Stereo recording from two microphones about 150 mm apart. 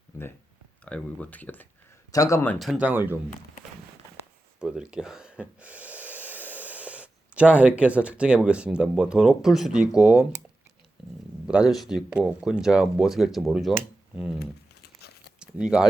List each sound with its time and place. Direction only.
0.9 s speech: 10° left (ahead or behind)
2.1 s a man's voice: 20° left (ahead or behind)
2.6 s speech: centre (ahead or behind)
2.8 s speech: 15° right (ahead or behind)
4.6 s speech: 5° right (ahead or behind)
11.4 s speech: 5° right (ahead or behind)
14.3 s crumpling: 90° left
15.4 s speech: 5° right (ahead or behind)